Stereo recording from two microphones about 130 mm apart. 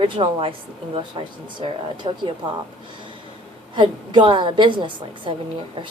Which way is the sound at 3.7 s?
35° right (ahead or behind).